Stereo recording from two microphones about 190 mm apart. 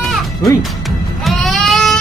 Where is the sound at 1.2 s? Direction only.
Centre (ahead or behind).